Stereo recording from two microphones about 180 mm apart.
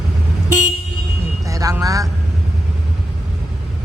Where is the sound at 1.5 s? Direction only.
20° right (ahead or behind).